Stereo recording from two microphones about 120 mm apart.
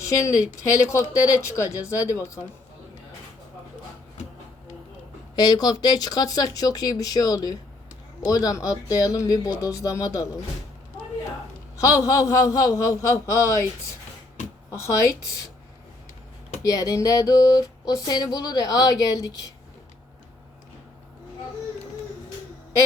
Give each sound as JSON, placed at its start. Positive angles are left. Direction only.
{"t": 0.1, "sound": "speech", "side_deg": 25}
{"t": 5.4, "sound": "speech", "side_deg": 35}
{"t": 11.8, "sound": "speech", "side_deg": 25}
{"t": 14.7, "sound": "speech", "side_deg": 25}
{"t": 16.6, "sound": "speech", "side_deg": 30}